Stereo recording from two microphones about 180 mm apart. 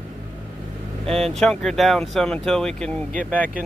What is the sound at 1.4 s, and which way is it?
Speech, centre (ahead or behind).